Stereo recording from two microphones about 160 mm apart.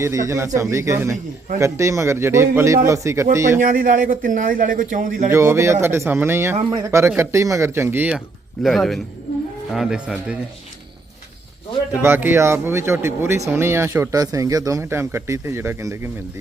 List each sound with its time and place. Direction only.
0.0 s speech: 20° right (ahead or behind)
3.6 s a man's voice: 60° right (ahead or behind)
5.3 s speech: 15° right (ahead or behind)
8.6 s speech: centre (ahead or behind)
12.0 s speech: 15° right (ahead or behind)